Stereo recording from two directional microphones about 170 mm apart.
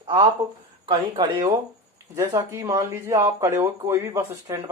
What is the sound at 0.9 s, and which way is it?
Speech, 25° right (ahead or behind).